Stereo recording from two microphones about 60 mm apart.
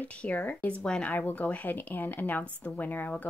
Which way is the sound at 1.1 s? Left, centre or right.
Left.